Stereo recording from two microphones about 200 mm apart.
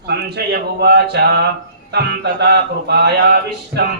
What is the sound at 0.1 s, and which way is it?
Speech, 55° right (ahead or behind).